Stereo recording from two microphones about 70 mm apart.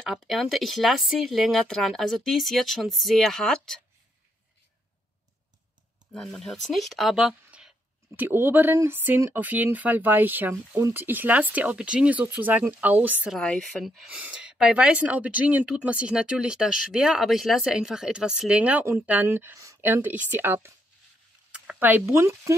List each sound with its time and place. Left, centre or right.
0.1 s speech: centre
6.1 s speech: centre
8.2 s speech: right
19.2 s speech: right
19.5 s a sound: right
19.8 s speech: right
21.5 s a sound: centre
21.7 s speech: right
22.0 s speech: right